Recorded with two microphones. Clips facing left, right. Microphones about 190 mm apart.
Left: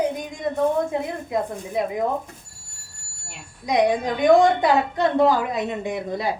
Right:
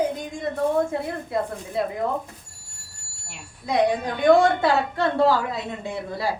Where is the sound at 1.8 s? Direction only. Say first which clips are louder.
Left 1 dB; 15° left (ahead or behind).